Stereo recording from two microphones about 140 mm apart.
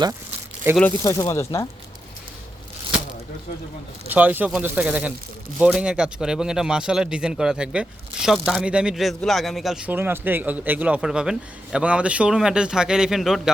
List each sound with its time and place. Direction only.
1.0 s speech: 20° left (ahead or behind)
4.1 s speech: 10° right (ahead or behind)